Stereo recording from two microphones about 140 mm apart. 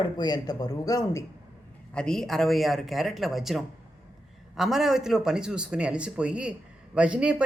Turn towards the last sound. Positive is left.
turn(degrees=-10)  # may be behind; listen again after turning